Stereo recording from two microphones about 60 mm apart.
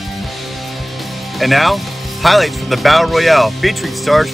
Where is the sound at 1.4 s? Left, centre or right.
Centre.